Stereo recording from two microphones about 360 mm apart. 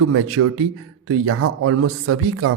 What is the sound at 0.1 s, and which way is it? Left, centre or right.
Speech, right.